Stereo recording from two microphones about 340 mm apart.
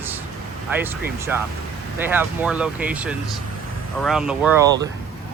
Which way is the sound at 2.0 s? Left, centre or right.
Centre.